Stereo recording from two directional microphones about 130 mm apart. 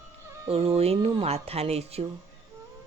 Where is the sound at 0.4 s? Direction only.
50° right (ahead or behind).